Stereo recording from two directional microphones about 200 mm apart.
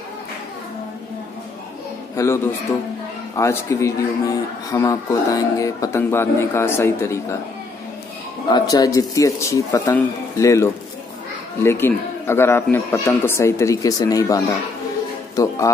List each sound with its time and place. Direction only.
2.1 s speech: 15° left (ahead or behind)
8.5 s speech: 20° left (ahead or behind)